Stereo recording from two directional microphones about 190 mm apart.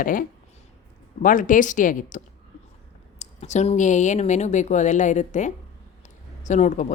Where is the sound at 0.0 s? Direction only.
45° left (ahead or behind).